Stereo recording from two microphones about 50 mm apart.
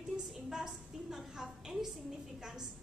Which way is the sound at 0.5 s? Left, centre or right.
Centre.